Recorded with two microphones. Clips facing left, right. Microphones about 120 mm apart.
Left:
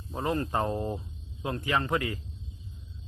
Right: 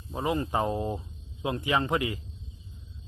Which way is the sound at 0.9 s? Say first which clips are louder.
Right 1 dB; 20° right (ahead or behind).